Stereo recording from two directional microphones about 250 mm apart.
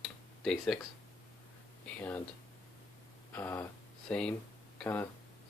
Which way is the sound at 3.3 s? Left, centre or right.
Centre.